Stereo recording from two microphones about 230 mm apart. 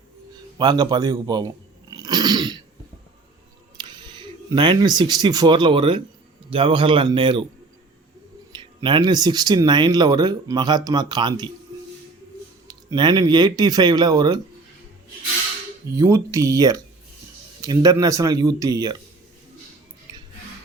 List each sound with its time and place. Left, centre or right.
0.6 s a sound: centre
3.8 s a man's voice: centre
8.5 s speech: right
12.6 s speech: centre
16.0 s speech: centre